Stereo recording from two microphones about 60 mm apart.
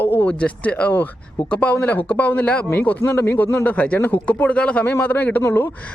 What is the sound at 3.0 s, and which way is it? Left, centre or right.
Speech, left.